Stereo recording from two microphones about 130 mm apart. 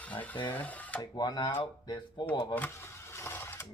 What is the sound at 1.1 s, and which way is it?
Speech, 30° left (ahead or behind).